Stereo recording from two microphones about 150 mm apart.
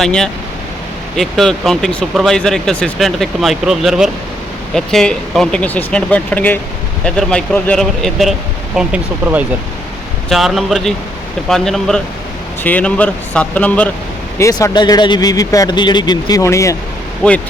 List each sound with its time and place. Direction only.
0.0 s speech: 5° left (ahead or behind)
14.3 s speech: 20° left (ahead or behind)
17.2 s speech: 5° left (ahead or behind)